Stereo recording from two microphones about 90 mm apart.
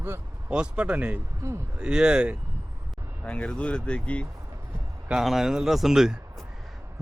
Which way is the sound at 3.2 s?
10° left (ahead or behind).